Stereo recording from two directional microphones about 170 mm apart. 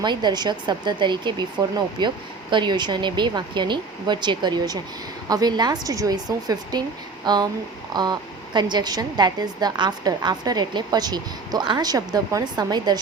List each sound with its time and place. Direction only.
0.0 s a woman's voice: 25° right (ahead or behind)